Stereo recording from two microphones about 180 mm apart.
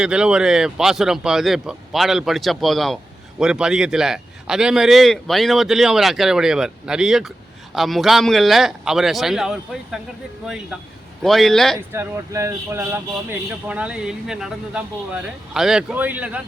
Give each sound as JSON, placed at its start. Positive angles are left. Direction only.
{"t": 0.0, "sound": "speech", "side_deg": -5}
{"t": 11.9, "sound": "speech", "side_deg": -15}